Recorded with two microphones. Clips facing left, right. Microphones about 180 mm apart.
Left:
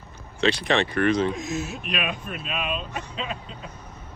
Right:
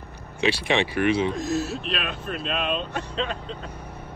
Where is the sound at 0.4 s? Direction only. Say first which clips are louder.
Left 1 dB; 10° right (ahead or behind).